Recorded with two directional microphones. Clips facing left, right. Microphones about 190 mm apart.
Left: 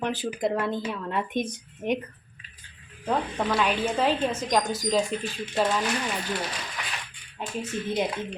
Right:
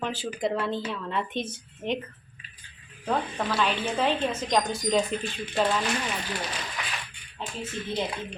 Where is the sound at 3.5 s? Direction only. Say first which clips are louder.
Left 1 dB; 5° left (ahead or behind).